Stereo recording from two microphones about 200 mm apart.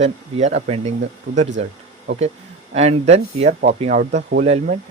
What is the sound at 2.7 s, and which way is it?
Speech, 30° right (ahead or behind).